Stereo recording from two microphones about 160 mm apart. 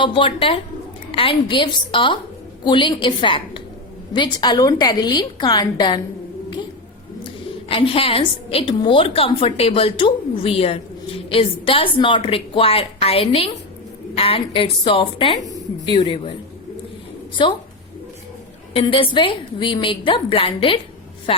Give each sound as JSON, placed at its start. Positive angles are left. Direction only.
{"t": 0.0, "sound": "a woman's voice", "side_deg": 30}
{"t": 7.7, "sound": "a woman's voice", "side_deg": 35}
{"t": 17.4, "sound": "a woman's voice", "side_deg": 30}
{"t": 18.7, "sound": "a woman's voice", "side_deg": 35}